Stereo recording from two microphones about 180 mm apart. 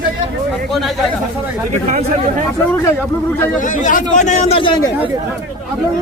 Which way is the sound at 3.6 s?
50° left (ahead or behind).